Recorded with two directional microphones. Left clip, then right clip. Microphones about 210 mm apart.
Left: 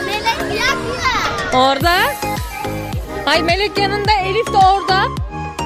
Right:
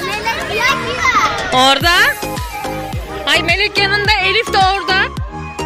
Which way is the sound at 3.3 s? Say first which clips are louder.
Right 1 dB; 20° left (ahead or behind).